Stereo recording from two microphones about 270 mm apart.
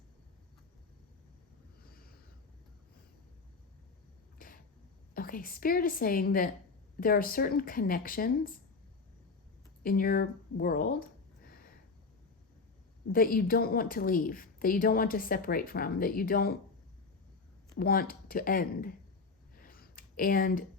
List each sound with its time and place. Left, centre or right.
4.4 s a sound: left
5.1 s a woman's voice: left
9.8 s a woman's voice: left
13.1 s a woman's voice: left
17.7 s a woman's voice: left
19.5 s a sound: left